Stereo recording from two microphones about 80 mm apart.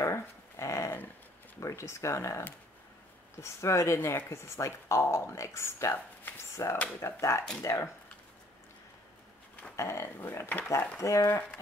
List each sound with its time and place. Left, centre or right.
0.0 s dog: left
1.6 s speech: left
9.8 s speech: left